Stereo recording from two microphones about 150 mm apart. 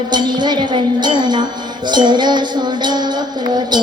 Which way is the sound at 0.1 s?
30° right (ahead or behind).